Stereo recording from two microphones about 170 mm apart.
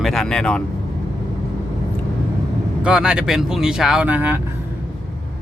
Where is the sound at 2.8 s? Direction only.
5° right (ahead or behind).